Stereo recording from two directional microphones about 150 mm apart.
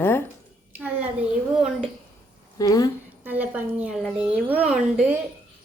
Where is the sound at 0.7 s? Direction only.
10° right (ahead or behind).